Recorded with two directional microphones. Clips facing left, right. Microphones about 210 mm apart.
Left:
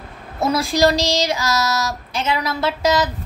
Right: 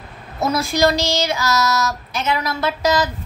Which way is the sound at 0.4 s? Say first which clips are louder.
Left 1 dB; 30° left (ahead or behind).